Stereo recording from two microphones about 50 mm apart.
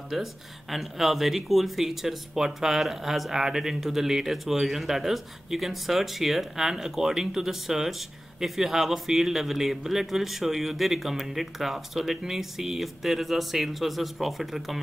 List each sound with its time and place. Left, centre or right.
0.1 s speech: centre